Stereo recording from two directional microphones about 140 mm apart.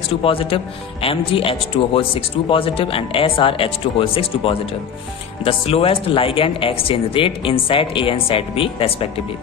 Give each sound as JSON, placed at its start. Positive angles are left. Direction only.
{"t": 0.2, "sound": "a man's voice", "side_deg": 40}